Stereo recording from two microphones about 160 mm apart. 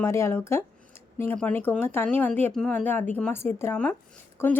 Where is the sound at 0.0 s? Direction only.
15° left (ahead or behind).